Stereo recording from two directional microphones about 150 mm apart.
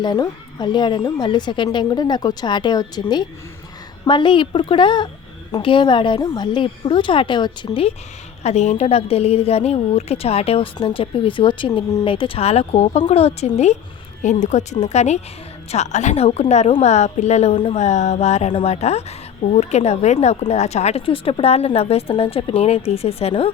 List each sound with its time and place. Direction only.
0.0 s a woman's voice: 30° left (ahead or behind)
8.4 s a woman's voice: 50° left (ahead or behind)